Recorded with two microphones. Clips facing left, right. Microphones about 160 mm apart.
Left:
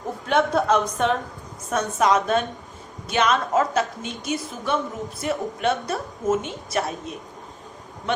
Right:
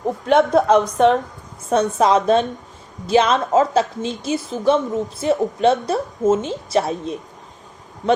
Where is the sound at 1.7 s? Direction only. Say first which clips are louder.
Right 5 dB; 30° right (ahead or behind).